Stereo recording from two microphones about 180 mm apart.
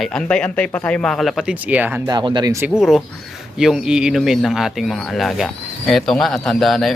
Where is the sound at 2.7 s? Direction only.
Centre (ahead or behind).